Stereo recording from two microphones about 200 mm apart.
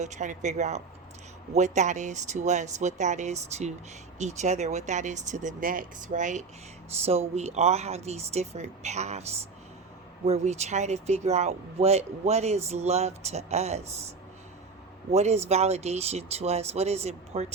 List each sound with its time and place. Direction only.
0.0 s speech: 35° right (ahead or behind)
15.1 s speech: 35° right (ahead or behind)